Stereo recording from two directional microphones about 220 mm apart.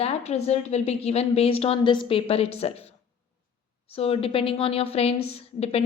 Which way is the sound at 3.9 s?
25° left (ahead or behind).